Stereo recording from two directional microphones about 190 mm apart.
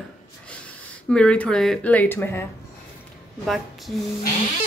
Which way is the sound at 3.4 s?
Centre (ahead or behind).